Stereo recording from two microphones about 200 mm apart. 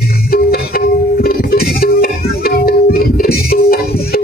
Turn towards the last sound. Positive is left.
turn(degrees=50)  # may be behind; listen again after turning